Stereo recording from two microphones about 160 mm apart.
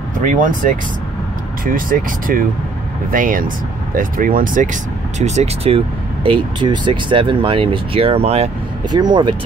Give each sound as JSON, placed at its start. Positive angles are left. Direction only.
{"t": 0.2, "sound": "speech", "side_deg": -55}
{"t": 5.2, "sound": "speech", "side_deg": -45}
{"t": 6.2, "sound": "speech", "side_deg": -30}
{"t": 8.9, "sound": "speech", "side_deg": -30}